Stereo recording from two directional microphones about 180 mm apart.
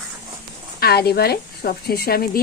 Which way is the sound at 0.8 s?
60° left (ahead or behind).